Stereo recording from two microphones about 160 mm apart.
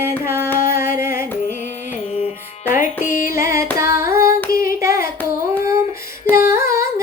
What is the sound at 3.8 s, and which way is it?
Singing, 15° right (ahead or behind).